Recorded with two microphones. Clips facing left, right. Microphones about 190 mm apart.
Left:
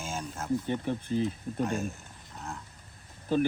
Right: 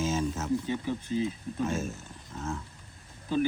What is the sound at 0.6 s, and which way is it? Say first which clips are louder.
Speech: even; 55° left (ahead or behind).